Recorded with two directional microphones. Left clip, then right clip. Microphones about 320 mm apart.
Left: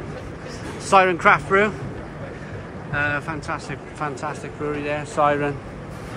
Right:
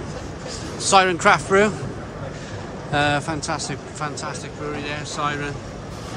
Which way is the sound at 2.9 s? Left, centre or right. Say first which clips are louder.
Right 3 dB; centre.